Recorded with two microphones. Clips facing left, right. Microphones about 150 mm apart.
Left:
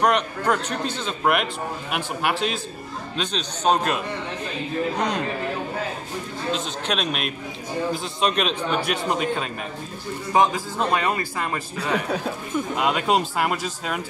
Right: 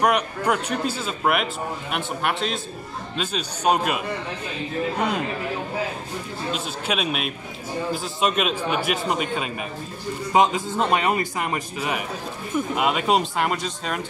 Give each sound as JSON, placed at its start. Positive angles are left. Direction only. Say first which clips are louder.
{"t": 0.0, "sound": "a man's voice", "louder": "even", "side_deg": -10}
{"t": 3.2, "sound": "a man's voice", "louder": "even", "side_deg": -10}
{"t": 6.5, "sound": "a man's voice", "louder": "left 1 dB", "side_deg": -5}
{"t": 10.3, "sound": "speech", "louder": "right 1 dB", "side_deg": -20}
{"t": 12.5, "sound": "a man's voice", "louder": "right 1 dB", "side_deg": -5}